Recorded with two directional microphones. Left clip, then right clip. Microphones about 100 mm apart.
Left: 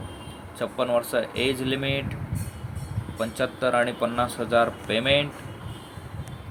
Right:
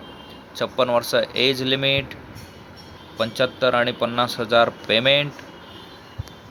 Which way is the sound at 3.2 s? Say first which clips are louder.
Right 5 dB; 20° right (ahead or behind).